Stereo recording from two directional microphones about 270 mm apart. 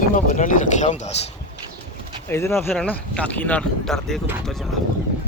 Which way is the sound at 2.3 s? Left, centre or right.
Centre.